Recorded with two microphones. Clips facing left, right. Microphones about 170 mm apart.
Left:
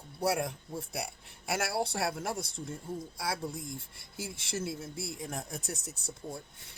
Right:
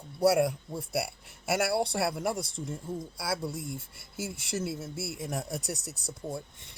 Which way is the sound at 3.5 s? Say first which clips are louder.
Right 4 dB; 75° right (ahead or behind).